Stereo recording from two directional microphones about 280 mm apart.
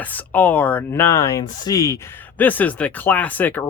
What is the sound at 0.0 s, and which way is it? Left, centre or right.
Speech, centre.